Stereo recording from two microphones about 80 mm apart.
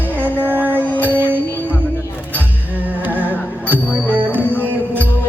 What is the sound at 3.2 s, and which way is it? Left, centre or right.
Music, right.